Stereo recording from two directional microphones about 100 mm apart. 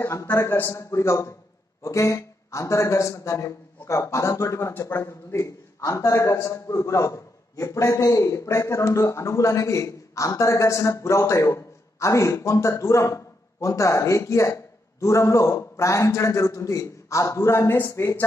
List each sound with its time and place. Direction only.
0.0 s a man's voice: 30° left (ahead or behind)